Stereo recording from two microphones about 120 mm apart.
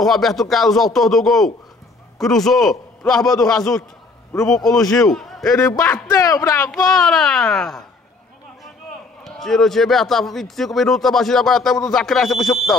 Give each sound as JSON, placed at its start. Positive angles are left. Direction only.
{"t": 0.0, "sound": "a man's voice", "side_deg": 0}
{"t": 5.5, "sound": "a man's voice", "side_deg": 30}
{"t": 6.7, "sound": "a man's voice", "side_deg": 5}
{"t": 9.2, "sound": "a man's voice", "side_deg": 5}